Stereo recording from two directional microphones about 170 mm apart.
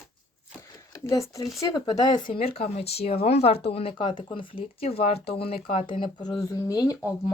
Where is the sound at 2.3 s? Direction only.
35° left (ahead or behind).